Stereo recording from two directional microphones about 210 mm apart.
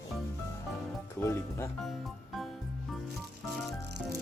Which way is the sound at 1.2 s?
10° left (ahead or behind).